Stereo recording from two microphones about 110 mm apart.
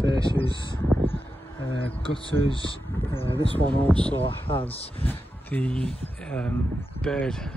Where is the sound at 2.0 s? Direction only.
55° left (ahead or behind).